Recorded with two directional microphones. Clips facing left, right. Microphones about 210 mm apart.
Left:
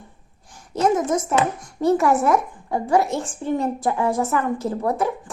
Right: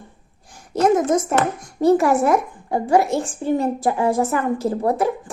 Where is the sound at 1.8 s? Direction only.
35° right (ahead or behind).